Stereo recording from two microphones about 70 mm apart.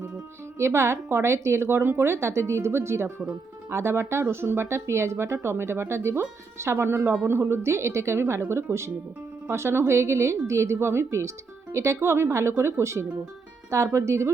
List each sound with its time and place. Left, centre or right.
0.6 s speech: right